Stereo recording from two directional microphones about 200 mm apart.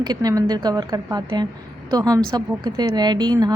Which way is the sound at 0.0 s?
20° right (ahead or behind).